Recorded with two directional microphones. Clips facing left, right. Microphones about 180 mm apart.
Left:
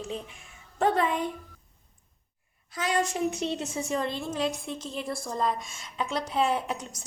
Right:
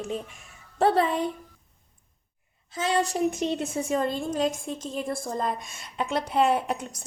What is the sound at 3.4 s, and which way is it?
A woman's voice, 55° right (ahead or behind).